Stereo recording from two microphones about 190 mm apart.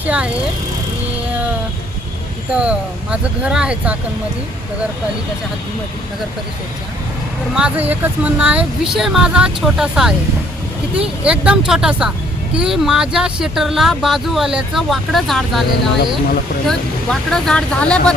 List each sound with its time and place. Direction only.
0.0 s speech: 5° right (ahead or behind)
2.5 s speech: 5° right (ahead or behind)
7.5 s speech: 5° right (ahead or behind)
11.2 s speech: 5° right (ahead or behind)
16.6 s speech: centre (ahead or behind)